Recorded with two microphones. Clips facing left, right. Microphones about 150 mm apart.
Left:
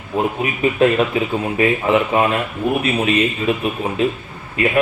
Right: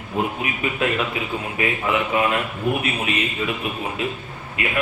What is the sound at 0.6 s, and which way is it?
A man's voice, 35° left (ahead or behind).